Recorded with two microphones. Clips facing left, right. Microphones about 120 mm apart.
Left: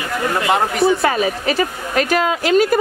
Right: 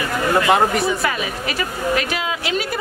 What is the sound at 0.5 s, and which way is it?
Speech, centre (ahead or behind).